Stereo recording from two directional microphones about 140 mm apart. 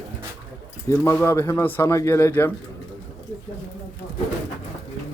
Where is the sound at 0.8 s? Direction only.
15° left (ahead or behind).